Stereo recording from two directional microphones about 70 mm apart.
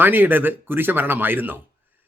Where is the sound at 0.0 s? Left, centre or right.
Right.